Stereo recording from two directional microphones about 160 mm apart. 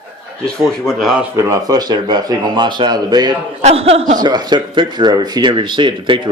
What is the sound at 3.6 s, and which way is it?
Speech, 40° right (ahead or behind).